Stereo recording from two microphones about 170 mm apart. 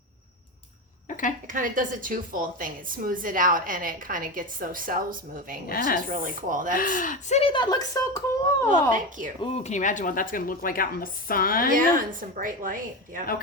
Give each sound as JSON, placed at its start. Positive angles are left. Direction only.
{"t": 1.0, "sound": "a sound", "side_deg": 50}
{"t": 1.5, "sound": "a woman's voice", "side_deg": -50}
{"t": 5.6, "sound": "speech", "side_deg": 55}
{"t": 6.1, "sound": "a woman's voice", "side_deg": -45}
{"t": 6.7, "sound": "speech", "side_deg": 55}
{"t": 8.7, "sound": "a woman's voice", "side_deg": -50}
{"t": 9.4, "sound": "speech", "side_deg": 35}
{"t": 11.7, "sound": "a woman's voice", "side_deg": -55}